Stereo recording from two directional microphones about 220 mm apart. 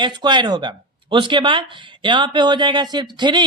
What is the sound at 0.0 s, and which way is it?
Speech, 20° right (ahead or behind).